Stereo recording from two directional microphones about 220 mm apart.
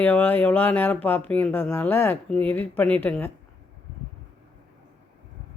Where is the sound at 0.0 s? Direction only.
10° left (ahead or behind).